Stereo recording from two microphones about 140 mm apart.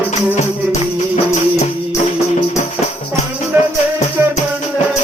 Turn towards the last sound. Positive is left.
turn(degrees=-15)  # may be behind; listen again after turning